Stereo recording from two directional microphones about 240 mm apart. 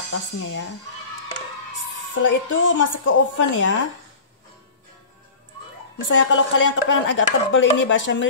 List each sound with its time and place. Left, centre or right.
0.1 s speech: left
2.1 s speech: left
5.9 s speech: left